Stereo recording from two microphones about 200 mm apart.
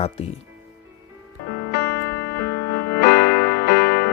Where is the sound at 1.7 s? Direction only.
55° left (ahead or behind).